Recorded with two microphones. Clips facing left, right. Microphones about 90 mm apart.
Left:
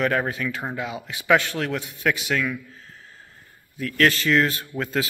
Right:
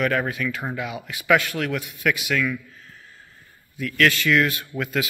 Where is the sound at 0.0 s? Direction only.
25° left (ahead or behind).